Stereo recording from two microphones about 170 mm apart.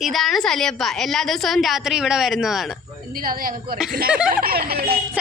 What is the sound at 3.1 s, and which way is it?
Speech, 55° right (ahead or behind).